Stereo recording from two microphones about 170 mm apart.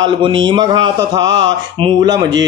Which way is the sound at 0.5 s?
25° right (ahead or behind).